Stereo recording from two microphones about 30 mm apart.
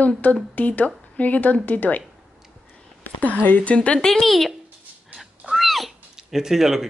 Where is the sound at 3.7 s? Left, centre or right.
Left.